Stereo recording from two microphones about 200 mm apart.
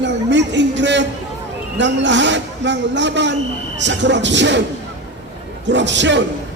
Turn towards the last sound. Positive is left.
turn(degrees=-65)  # may be behind; listen again after turning